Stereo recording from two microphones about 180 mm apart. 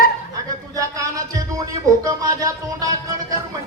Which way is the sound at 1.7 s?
20° right (ahead or behind).